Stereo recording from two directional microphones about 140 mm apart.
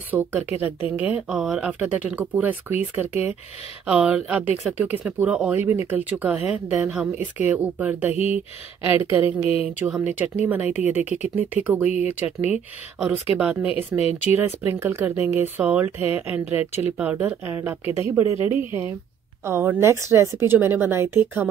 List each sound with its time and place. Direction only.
0.1 s speech: 10° right (ahead or behind)
8.1 s speech: 45° left (ahead or behind)
8.8 s speech: 15° right (ahead or behind)
12.3 s speech: 50° left (ahead or behind)
13.0 s speech: 5° right (ahead or behind)